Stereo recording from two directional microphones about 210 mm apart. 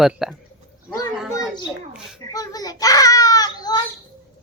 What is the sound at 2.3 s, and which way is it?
Baby cry, 15° left (ahead or behind).